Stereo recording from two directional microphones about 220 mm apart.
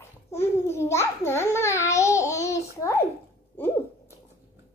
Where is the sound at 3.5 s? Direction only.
10° left (ahead or behind).